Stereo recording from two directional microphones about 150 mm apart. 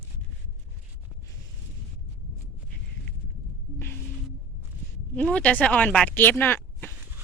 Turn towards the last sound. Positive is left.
turn(degrees=15)  # may be behind; listen again after turning